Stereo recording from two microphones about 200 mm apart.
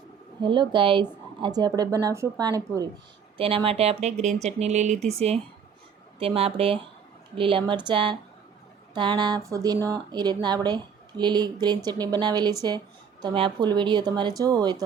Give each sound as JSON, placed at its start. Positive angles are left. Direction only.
{"t": 0.4, "sound": "speech", "side_deg": -25}